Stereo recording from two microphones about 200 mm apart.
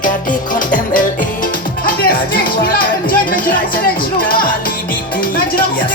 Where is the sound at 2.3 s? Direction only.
45° left (ahead or behind).